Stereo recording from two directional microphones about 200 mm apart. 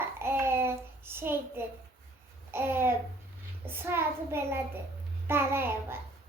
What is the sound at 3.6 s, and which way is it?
Child singing, 10° right (ahead or behind).